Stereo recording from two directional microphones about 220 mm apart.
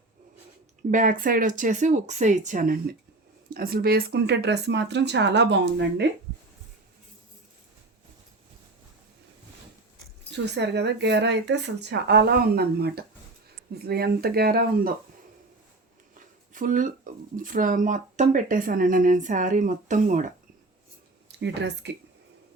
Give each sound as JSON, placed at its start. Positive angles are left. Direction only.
{"t": 0.9, "sound": "speech", "side_deg": -35}
{"t": 10.3, "sound": "speech", "side_deg": -50}
{"t": 16.1, "sound": "speech", "side_deg": -35}
{"t": 21.2, "sound": "speech", "side_deg": -50}